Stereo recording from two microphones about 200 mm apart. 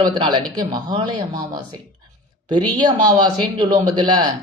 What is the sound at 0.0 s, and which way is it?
A man's voice, 20° right (ahead or behind).